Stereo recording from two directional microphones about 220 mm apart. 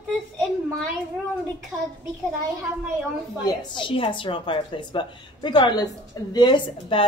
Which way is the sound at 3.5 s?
20° left (ahead or behind).